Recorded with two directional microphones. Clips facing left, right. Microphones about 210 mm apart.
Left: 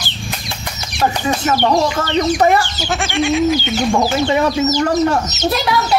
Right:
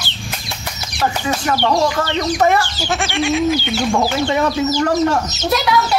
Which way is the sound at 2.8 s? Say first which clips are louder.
Left 1 dB; centre (ahead or behind).